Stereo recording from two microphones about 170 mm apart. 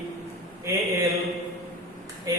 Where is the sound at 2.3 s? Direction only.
15° right (ahead or behind).